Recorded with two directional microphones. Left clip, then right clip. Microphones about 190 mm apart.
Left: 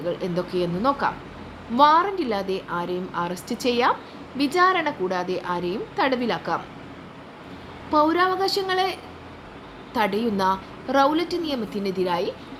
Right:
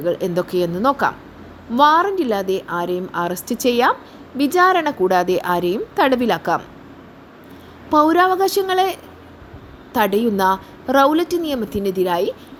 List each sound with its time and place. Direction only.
0.0 s a woman's voice: 40° right (ahead or behind)
7.9 s a woman's voice: 40° right (ahead or behind)